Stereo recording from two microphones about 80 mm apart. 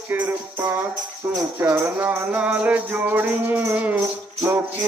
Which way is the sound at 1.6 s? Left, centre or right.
Right.